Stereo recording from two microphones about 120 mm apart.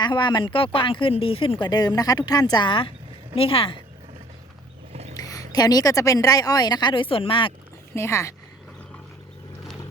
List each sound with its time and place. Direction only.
0.0 s speech: 40° left (ahead or behind)
4.9 s a sound: 60° right (ahead or behind)
5.2 s speech: 30° left (ahead or behind); by 7.5 s 45° left (ahead or behind)
7.9 s speech: 25° left (ahead or behind)